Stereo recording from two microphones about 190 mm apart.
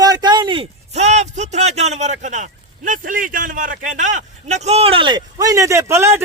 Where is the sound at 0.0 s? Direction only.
20° right (ahead or behind); by 2.1 s 35° right (ahead or behind).